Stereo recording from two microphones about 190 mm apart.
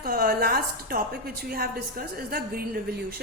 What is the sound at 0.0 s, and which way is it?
A woman's voice, 55° right (ahead or behind).